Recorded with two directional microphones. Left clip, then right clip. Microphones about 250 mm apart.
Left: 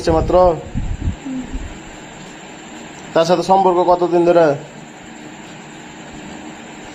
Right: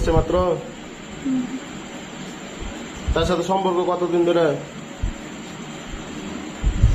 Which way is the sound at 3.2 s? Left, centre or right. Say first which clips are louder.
Left 8 dB; left.